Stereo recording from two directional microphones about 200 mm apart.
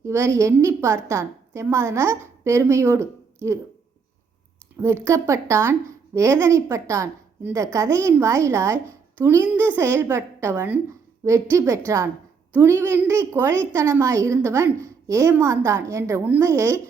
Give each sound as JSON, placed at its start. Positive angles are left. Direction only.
{"t": 0.0, "sound": "a woman's voice", "side_deg": -15}
{"t": 4.8, "sound": "a woman's voice", "side_deg": -15}